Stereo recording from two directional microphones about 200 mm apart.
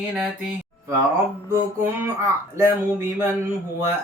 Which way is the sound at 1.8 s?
10° right (ahead or behind).